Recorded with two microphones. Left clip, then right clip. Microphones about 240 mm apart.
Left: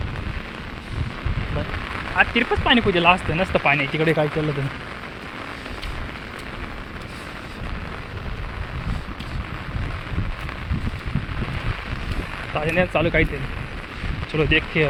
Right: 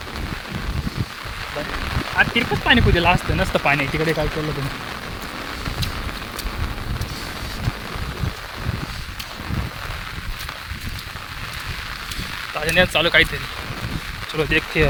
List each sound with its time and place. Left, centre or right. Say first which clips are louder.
2.1 s speech: even; centre
4.0 s speech: left 1 dB; centre
12.6 s speech: right 4 dB; right
14.3 s speech: even; right